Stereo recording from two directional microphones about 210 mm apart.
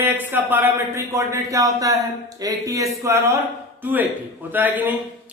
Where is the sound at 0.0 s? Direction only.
10° right (ahead or behind).